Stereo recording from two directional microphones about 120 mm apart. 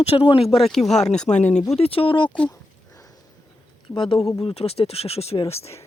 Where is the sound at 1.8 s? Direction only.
50° left (ahead or behind).